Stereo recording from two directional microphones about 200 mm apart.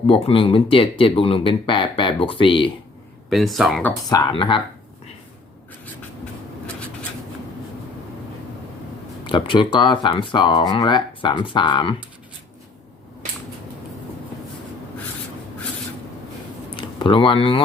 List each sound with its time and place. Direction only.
0.1 s speech: 30° left (ahead or behind)
3.2 s speech: centre (ahead or behind)
4.1 s speech: 20° left (ahead or behind)
9.2 s speech: 25° left (ahead or behind)
16.7 s speech: 25° left (ahead or behind)